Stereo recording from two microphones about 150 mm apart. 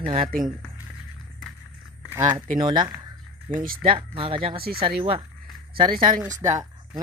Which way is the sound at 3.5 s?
70° right (ahead or behind).